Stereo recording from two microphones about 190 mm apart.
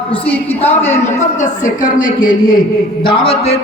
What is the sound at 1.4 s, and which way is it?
A woman's voice, 45° left (ahead or behind).